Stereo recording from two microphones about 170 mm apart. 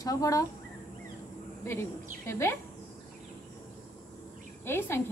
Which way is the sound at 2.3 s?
15° left (ahead or behind).